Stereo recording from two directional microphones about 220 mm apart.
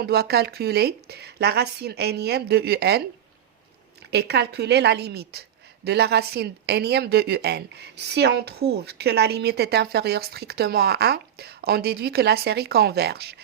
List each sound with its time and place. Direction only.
0.0 s a woman's voice: 45° right (ahead or behind)
4.1 s a woman's voice: 50° right (ahead or behind)